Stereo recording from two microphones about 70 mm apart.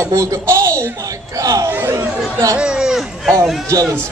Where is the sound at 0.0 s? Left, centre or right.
Right.